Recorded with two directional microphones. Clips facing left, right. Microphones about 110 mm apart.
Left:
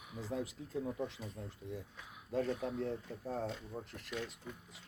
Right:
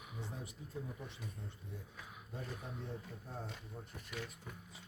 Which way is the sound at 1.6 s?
90° left.